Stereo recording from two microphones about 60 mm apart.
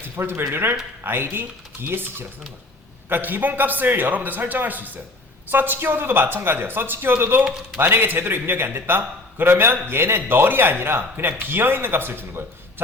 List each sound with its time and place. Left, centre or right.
0.0 s speech: right